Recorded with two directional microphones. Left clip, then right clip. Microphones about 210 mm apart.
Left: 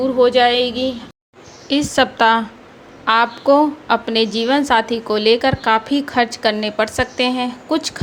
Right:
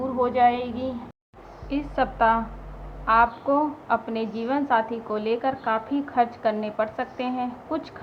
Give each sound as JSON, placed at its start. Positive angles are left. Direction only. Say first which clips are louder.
{"t": 0.2, "sound": "a woman's voice", "louder": "left 7 dB", "side_deg": 30}